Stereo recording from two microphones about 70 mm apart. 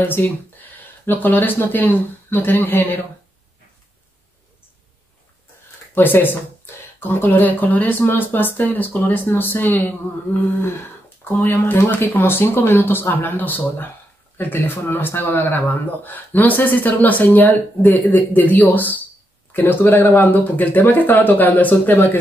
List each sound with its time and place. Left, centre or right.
0.0 s speech: left
5.9 s speech: left
11.2 s speech: left